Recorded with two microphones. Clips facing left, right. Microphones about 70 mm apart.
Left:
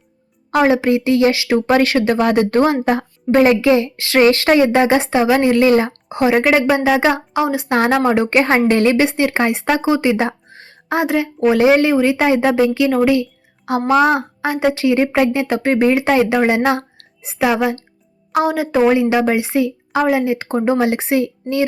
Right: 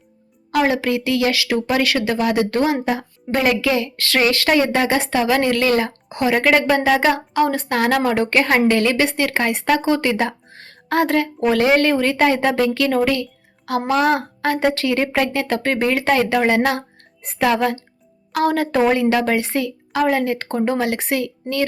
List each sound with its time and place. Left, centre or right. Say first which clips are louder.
0.5 s speech: left 4 dB; left
2.8 s a woman's voice: left 5 dB; left
3.3 s a woman's voice: left 6 dB; left
7.7 s a woman's voice: left 3 dB; left
13.7 s a woman's voice: left 4 dB; left
18.3 s music: left 2 dB; centre
18.5 s a woman's voice: left 4 dB; centre
19.0 s a woman's voice: left 2 dB; centre